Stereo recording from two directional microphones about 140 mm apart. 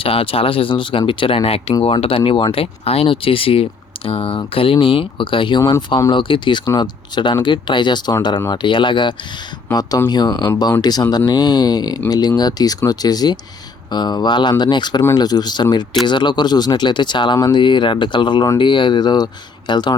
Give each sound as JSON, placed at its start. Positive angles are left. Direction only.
{"t": 0.0, "sound": "speech", "side_deg": 40}